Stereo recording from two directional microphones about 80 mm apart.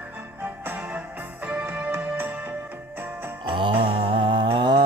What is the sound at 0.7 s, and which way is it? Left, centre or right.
Music, centre.